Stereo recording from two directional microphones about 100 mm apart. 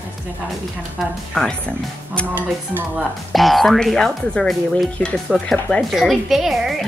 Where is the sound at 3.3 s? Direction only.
Centre (ahead or behind).